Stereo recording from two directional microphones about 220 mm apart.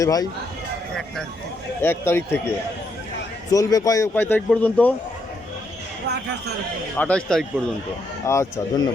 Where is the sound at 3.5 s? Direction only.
15° left (ahead or behind).